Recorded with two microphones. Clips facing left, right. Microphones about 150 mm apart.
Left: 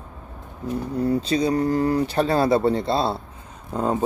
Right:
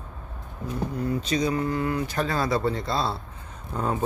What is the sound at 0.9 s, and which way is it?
Speech, 30° left (ahead or behind).